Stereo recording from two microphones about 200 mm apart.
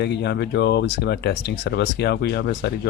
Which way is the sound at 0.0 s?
55° left (ahead or behind).